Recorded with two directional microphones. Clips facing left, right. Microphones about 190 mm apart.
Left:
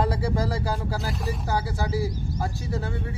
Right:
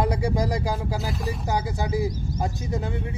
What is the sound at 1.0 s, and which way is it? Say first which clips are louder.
Speech: right 1 dB; centre (ahead or behind).